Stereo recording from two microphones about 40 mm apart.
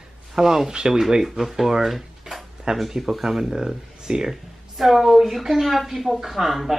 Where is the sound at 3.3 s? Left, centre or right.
Centre.